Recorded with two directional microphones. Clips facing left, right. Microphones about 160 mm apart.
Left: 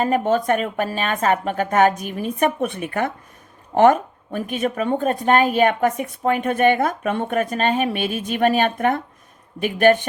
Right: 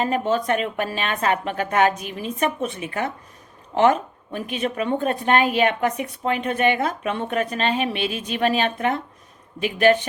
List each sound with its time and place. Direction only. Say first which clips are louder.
0.0 s a woman's voice: left 3 dB; 50° left (ahead or behind)